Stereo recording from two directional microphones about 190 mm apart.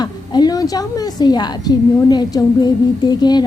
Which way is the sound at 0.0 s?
20° left (ahead or behind).